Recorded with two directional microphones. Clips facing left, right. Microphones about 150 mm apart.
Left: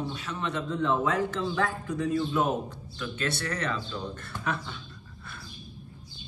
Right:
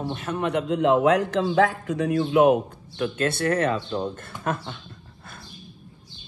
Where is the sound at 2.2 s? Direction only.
70° right (ahead or behind).